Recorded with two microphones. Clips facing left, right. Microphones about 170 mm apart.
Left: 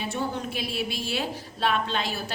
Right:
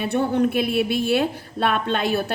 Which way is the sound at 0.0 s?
60° right (ahead or behind).